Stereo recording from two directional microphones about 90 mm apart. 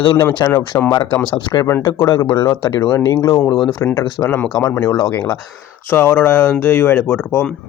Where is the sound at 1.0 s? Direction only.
20° left (ahead or behind).